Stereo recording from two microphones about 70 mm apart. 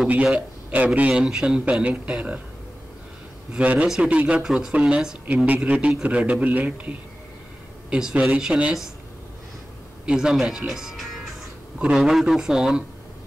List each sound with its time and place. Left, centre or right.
0.1 s a man's voice: centre
3.5 s a man's voice: centre
10.0 s speech: centre